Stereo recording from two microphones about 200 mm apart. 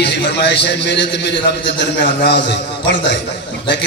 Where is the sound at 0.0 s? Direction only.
60° left (ahead or behind).